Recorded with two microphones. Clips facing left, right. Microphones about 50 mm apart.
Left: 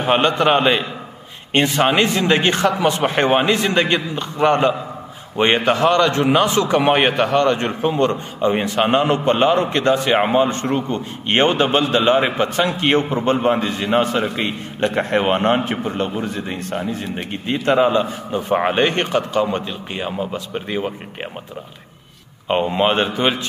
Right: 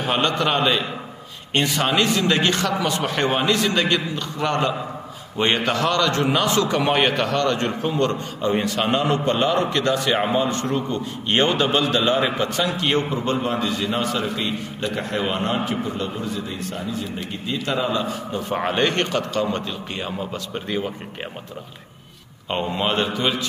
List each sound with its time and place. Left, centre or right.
0.0 s a man's voice: left
18.3 s a man's voice: left
22.5 s a man's voice: left